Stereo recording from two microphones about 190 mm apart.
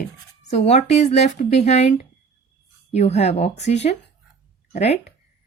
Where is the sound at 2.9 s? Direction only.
35° left (ahead or behind).